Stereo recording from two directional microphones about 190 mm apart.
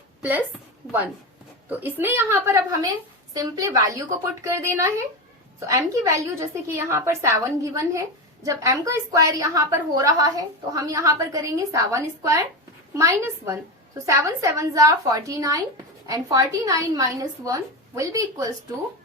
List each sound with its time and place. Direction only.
0.2 s a woman's voice: 10° right (ahead or behind)
1.7 s a woman's voice: 10° right (ahead or behind)